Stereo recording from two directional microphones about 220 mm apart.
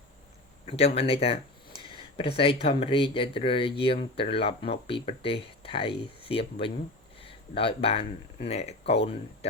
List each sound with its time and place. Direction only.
0.6 s speech: 25° left (ahead or behind)